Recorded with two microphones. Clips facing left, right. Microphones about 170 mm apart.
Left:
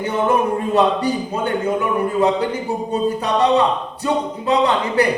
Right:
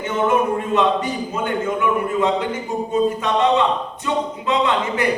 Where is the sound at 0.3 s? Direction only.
35° left (ahead or behind).